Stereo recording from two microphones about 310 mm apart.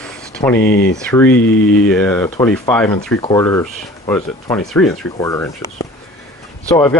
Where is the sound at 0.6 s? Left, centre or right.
Left.